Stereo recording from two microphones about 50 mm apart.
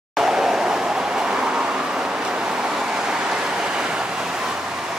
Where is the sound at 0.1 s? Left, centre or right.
Centre.